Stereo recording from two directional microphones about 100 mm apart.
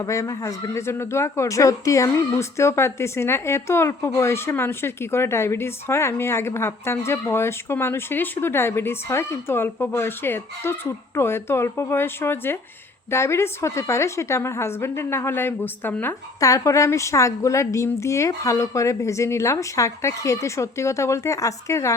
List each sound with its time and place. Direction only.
0.0 s a woman's voice: 35° left (ahead or behind); by 16.1 s 20° left (ahead or behind)
16.4 s a woman's voice: 35° left (ahead or behind)